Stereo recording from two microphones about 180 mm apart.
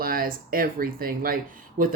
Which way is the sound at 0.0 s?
55° right (ahead or behind).